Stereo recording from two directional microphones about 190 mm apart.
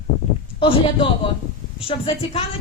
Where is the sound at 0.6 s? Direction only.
25° left (ahead or behind).